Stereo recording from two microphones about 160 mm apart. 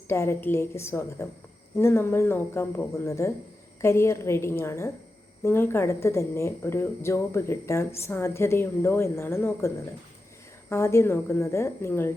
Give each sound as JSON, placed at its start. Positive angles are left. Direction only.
{"t": 0.1, "sound": "speech", "side_deg": 15}